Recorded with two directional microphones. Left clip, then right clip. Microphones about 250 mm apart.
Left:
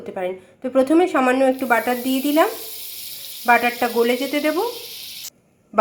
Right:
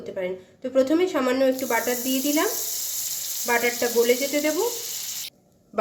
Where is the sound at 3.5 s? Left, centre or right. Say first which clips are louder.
Left 6 dB; centre.